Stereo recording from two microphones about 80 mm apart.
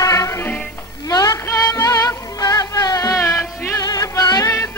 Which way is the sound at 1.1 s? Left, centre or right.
Left.